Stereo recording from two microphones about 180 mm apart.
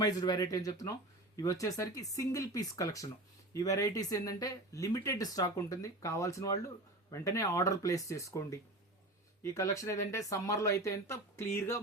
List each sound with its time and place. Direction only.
0.0 s speech: 20° left (ahead or behind)